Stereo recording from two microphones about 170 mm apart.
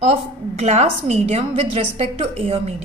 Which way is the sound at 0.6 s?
40° right (ahead or behind).